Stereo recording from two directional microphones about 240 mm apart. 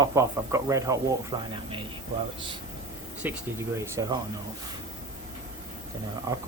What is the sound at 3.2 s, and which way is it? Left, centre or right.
Speech, centre.